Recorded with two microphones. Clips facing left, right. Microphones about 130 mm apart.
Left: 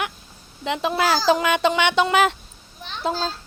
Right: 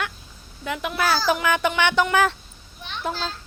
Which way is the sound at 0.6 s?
25° left (ahead or behind).